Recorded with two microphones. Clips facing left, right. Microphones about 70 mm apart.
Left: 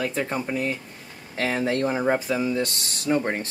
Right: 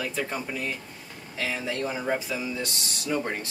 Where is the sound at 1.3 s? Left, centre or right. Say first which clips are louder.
Left 6 dB; left.